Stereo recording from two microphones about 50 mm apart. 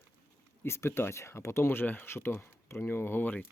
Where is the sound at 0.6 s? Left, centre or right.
Left.